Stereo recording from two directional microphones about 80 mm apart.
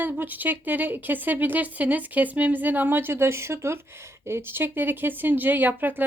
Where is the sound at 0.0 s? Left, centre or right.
Right.